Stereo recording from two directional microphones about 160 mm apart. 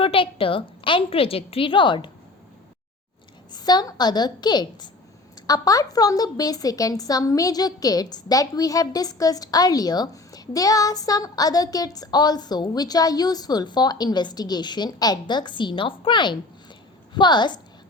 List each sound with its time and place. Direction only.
0.0 s a woman's voice: 35° left (ahead or behind)
3.5 s a woman's voice: 25° left (ahead or behind)